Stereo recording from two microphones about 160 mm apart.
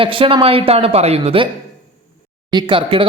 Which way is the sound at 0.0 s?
35° right (ahead or behind).